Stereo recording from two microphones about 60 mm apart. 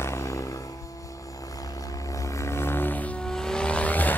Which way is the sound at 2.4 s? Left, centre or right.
Left.